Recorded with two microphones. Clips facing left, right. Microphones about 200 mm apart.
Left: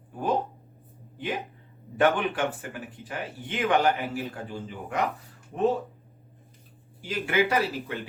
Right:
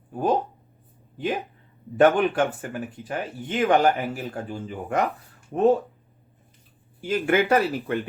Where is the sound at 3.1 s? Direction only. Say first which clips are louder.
Right 3 dB; 45° right (ahead or behind).